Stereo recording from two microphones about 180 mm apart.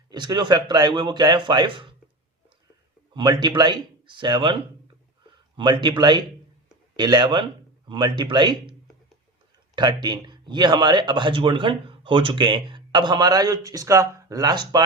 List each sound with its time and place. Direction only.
0.1 s speech: 25° right (ahead or behind)
3.2 s speech: 25° right (ahead or behind)
5.5 s a man's voice: 25° right (ahead or behind)
9.7 s speech: 25° right (ahead or behind)